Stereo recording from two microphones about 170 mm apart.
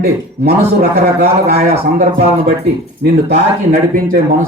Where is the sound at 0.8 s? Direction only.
65° right (ahead or behind).